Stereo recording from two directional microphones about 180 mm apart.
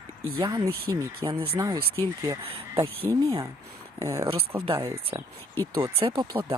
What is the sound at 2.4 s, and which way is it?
Speech, 30° right (ahead or behind).